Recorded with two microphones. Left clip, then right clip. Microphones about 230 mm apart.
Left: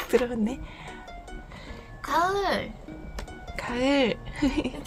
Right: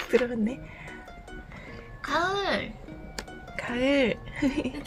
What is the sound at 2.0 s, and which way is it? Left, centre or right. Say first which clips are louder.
Music: left 2 dB; left.